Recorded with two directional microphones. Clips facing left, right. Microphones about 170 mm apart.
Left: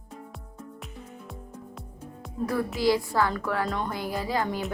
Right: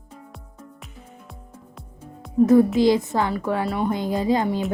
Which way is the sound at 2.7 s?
20° right (ahead or behind).